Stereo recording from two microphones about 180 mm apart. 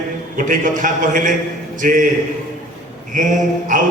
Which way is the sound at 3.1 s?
45° right (ahead or behind).